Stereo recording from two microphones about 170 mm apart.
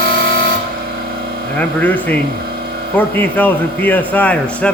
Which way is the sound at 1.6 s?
10° left (ahead or behind).